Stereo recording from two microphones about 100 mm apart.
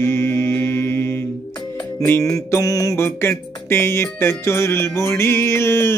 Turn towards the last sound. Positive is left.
turn(degrees=25)  # may be behind; listen again after turning